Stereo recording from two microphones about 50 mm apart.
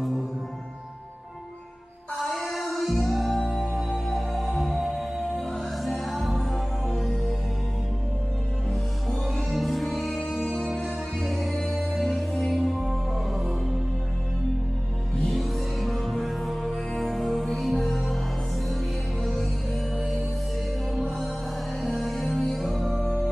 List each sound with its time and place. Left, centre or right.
2.1 s music: centre
3.4 s music: centre
3.9 s music: centre
9.5 s music: centre
15.1 s music: centre
19.2 s music: centre
21.8 s music: centre
23.0 s music: centre